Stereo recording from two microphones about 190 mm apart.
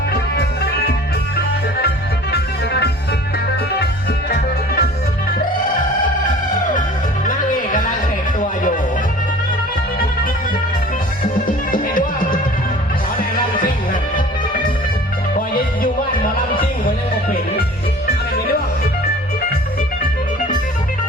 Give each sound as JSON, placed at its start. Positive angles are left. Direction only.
{"t": 0.1, "sound": "music", "side_deg": 55}
{"t": 2.3, "sound": "music", "side_deg": 60}
{"t": 4.3, "sound": "music", "side_deg": 55}
{"t": 7.3, "sound": "music", "side_deg": 45}
{"t": 11.2, "sound": "music", "side_deg": 45}
{"t": 15.4, "sound": "music", "side_deg": 50}